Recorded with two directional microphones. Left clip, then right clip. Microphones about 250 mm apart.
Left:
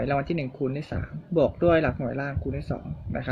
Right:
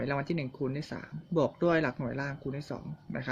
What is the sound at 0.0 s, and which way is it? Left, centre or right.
Speech, centre.